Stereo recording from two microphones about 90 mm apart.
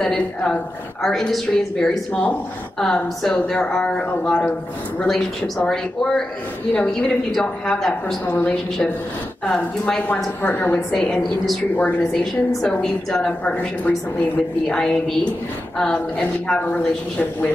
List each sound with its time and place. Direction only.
0.0 s speech: 10° left (ahead or behind)
6.7 s speech: 10° left (ahead or behind)
8.3 s a woman's voice: 20° left (ahead or behind)
10.9 s speech: 5° left (ahead or behind)